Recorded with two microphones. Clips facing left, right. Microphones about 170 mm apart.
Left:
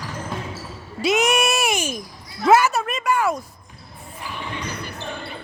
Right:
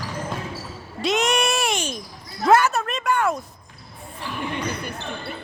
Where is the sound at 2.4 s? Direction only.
5° left (ahead or behind).